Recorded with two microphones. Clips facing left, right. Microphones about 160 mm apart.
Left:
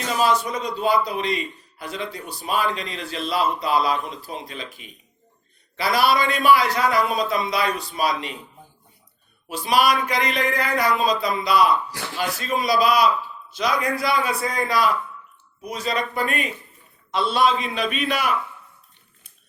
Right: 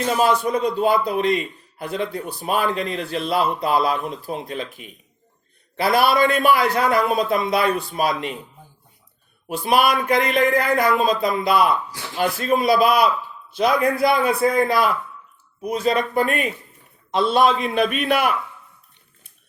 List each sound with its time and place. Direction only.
0.2 s a man's voice: 55° right (ahead or behind)
9.5 s a man's voice: 55° right (ahead or behind)